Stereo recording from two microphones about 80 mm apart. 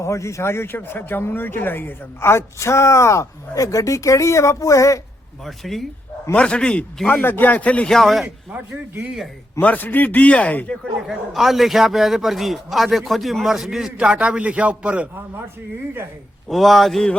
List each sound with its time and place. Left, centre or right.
0.0 s speech: left
5.5 s a man's voice: centre
6.3 s speech: centre
7.1 s a man's voice: left
7.9 s a man's voice: centre
9.6 s a man's voice: left
11.0 s a man's voice: centre
16.5 s a man's voice: centre